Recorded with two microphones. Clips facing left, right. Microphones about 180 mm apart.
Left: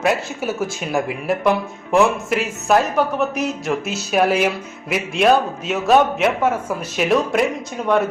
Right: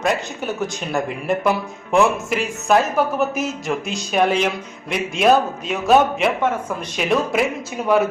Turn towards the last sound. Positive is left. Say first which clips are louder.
# even
turn(degrees=-5)  # may be behind; listen again after turning